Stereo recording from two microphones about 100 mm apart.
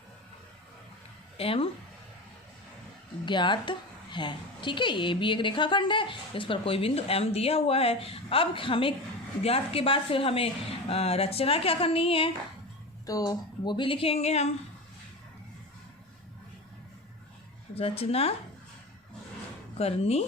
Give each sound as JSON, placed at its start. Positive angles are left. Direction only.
{"t": 1.4, "sound": "a woman's voice", "side_deg": 70}
{"t": 3.2, "sound": "a woman's voice", "side_deg": 50}
{"t": 9.4, "sound": "a woman's voice", "side_deg": 80}
{"t": 13.1, "sound": "speech", "side_deg": 35}
{"t": 13.7, "sound": "speech", "side_deg": 55}
{"t": 17.7, "sound": "speech", "side_deg": 85}
{"t": 19.8, "sound": "speech", "side_deg": 90}